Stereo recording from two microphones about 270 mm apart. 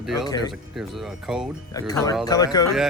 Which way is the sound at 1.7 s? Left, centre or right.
Centre.